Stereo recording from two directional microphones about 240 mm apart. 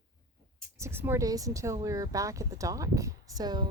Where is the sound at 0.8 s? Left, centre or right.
Centre.